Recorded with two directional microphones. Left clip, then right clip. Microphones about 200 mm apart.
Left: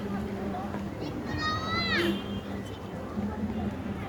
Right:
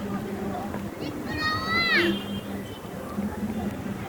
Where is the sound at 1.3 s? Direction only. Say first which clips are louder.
Right 5 dB; 25° left (ahead or behind).